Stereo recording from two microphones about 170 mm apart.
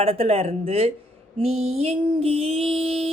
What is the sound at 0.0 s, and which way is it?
Speech, 35° right (ahead or behind).